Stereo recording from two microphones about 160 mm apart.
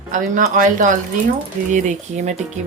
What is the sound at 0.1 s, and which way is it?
Speech, 55° right (ahead or behind).